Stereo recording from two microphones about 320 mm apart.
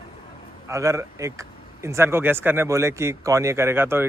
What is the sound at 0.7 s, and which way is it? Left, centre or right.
Speech, centre.